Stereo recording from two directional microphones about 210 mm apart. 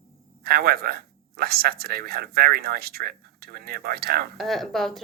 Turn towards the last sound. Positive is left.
turn(degrees=0)  # may be behind; listen again after turning